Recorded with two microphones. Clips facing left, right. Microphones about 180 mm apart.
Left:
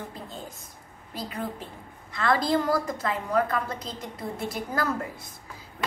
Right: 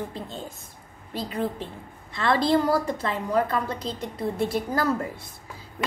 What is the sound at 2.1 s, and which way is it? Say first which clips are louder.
A woman's voice: right 2 dB; 30° right (ahead or behind).